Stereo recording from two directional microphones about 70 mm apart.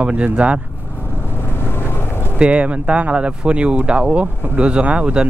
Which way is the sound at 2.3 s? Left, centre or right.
Centre.